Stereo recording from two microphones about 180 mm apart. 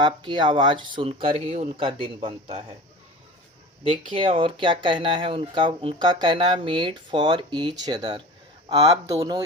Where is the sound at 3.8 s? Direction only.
30° right (ahead or behind).